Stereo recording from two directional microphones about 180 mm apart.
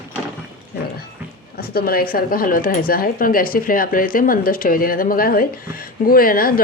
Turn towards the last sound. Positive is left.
turn(degrees=55)  # may be behind; listen again after turning